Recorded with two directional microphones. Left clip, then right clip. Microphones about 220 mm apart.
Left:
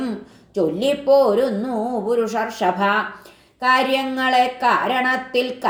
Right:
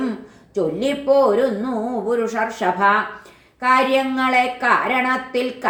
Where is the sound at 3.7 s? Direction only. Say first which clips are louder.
Right 2 dB; 30° left (ahead or behind).